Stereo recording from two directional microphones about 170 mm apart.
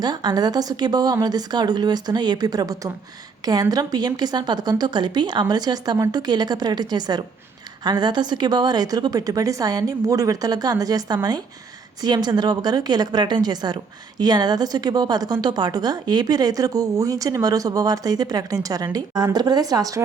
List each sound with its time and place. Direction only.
0.0 s a woman's voice: 25° right (ahead or behind)